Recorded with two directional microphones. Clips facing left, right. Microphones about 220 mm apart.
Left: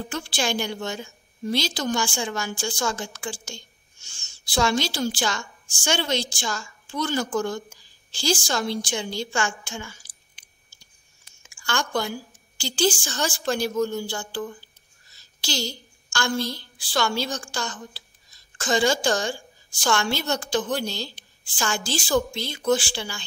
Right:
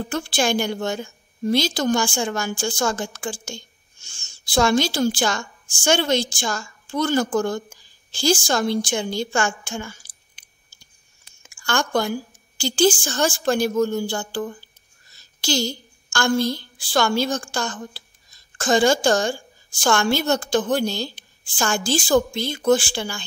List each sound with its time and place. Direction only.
0.1 s a woman's voice: 50° right (ahead or behind)
11.4 s a woman's voice: 50° right (ahead or behind)